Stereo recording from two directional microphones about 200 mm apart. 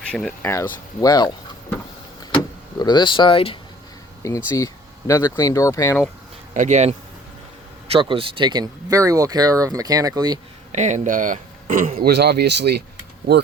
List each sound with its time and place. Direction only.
0.1 s speech: centre (ahead or behind)
0.4 s speech: 10° left (ahead or behind)
2.3 s speech: 20° left (ahead or behind)
4.2 s speech: 15° left (ahead or behind)
6.5 s speech: 35° right (ahead or behind)
7.9 s speech: 25° right (ahead or behind)
10.7 s speech: 35° right (ahead or behind); by 12.8 s 55° right (ahead or behind)